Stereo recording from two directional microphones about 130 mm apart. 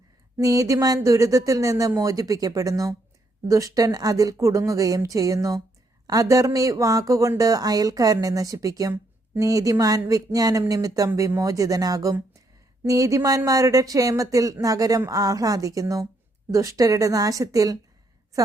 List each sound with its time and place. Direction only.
0.3 s speech: 25° right (ahead or behind)